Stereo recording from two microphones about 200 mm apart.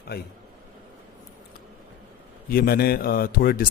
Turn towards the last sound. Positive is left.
turn(degrees=45)  # may be behind; listen again after turning